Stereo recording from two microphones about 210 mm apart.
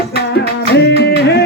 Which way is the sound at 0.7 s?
55° left (ahead or behind).